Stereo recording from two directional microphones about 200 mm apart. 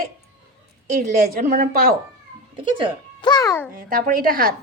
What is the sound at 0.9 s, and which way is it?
A woman's voice, 45° right (ahead or behind).